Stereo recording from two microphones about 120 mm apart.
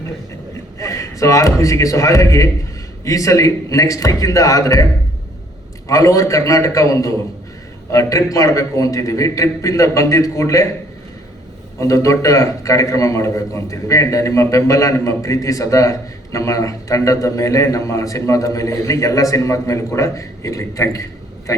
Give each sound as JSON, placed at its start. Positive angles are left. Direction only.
{"t": 0.8, "sound": "a man's voice", "side_deg": 25}
{"t": 5.9, "sound": "a man's voice", "side_deg": 25}
{"t": 11.8, "sound": "a man's voice", "side_deg": 25}